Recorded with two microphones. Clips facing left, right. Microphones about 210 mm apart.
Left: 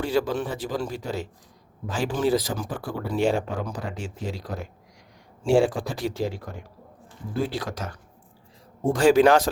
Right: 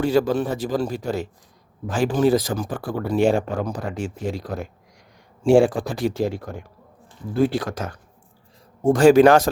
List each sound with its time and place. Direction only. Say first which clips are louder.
0.0 s speech: right 5 dB; 45° right (ahead or behind)
7.4 s speech: right 8 dB; 50° right (ahead or behind)